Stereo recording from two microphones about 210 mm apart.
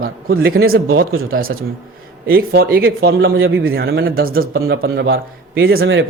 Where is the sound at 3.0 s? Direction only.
70° right (ahead or behind).